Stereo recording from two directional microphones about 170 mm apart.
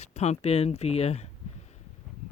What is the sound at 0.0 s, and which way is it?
Speech, 40° left (ahead or behind).